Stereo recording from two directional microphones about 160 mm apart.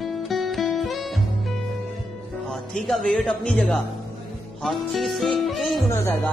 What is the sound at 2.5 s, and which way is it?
Speech, centre (ahead or behind).